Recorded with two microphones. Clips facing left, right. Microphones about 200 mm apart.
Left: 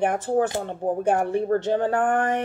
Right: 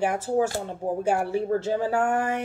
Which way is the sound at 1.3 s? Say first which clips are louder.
Left 3 dB; 5° right (ahead or behind).